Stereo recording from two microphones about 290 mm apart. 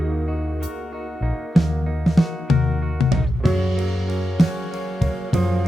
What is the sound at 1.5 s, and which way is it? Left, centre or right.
Music, centre.